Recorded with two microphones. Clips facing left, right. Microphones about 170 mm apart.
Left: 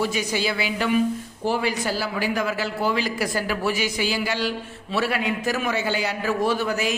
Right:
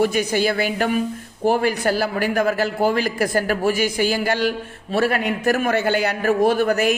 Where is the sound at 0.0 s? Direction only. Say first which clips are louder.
Right 6 dB; 55° right (ahead or behind).